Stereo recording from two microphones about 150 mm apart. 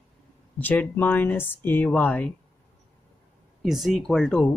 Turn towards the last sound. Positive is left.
turn(degrees=5)  # may be behind; listen again after turning